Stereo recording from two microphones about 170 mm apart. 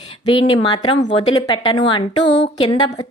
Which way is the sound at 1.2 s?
25° left (ahead or behind).